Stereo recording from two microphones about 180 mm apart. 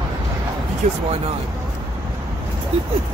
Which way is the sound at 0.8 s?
45° right (ahead or behind).